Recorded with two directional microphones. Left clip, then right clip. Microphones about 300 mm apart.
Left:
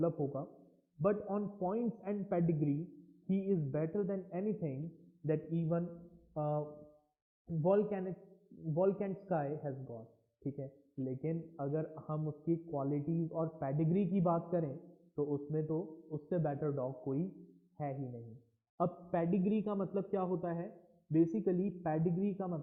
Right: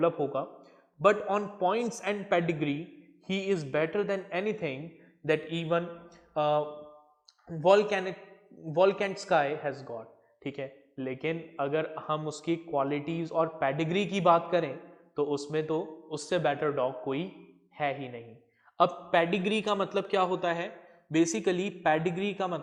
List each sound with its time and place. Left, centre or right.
0.0 s a man's voice: centre
5.2 s mantra: centre
7.7 s a man's voice: centre